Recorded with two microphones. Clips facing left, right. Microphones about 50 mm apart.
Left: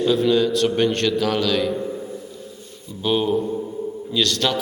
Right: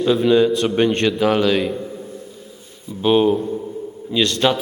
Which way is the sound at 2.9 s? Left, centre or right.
Right.